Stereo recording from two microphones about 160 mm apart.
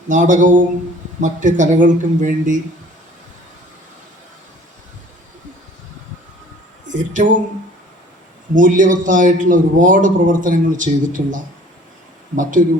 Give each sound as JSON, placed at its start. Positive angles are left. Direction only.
{"t": 0.1, "sound": "speech", "side_deg": -50}
{"t": 6.8, "sound": "speech", "side_deg": -50}
{"t": 8.5, "sound": "a man's voice", "side_deg": -55}